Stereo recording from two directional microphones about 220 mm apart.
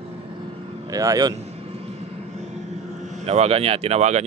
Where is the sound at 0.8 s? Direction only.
15° right (ahead or behind).